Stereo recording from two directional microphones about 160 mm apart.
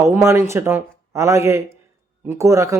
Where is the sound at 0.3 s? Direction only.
20° right (ahead or behind).